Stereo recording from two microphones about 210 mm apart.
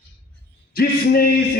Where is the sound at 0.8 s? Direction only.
45° left (ahead or behind).